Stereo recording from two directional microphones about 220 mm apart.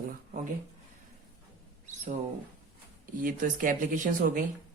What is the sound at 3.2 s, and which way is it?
Speech, 35° right (ahead or behind).